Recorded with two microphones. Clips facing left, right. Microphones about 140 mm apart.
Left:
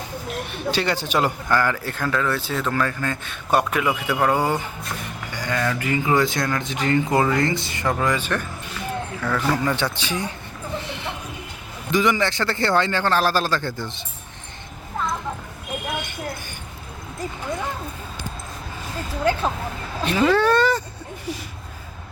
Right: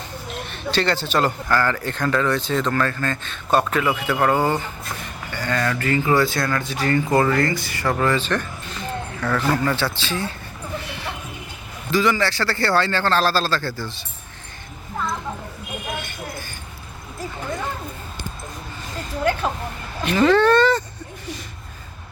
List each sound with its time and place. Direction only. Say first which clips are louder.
0.5 s speech: right 2 dB; 10° left (ahead or behind)
10.8 s a sound: left 1 dB; 20° left (ahead or behind)
11.9 s a man's voice: even; 20° left (ahead or behind)
20.1 s speech: right 2 dB; 5° left (ahead or behind)